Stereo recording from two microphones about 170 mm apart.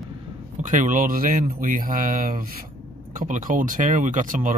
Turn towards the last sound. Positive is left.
turn(degrees=-50)  # may be behind; listen again after turning